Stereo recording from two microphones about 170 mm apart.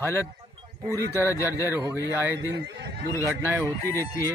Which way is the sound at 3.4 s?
15° right (ahead or behind).